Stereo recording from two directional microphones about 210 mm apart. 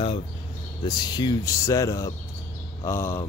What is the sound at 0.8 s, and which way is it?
Speech, 20° left (ahead or behind).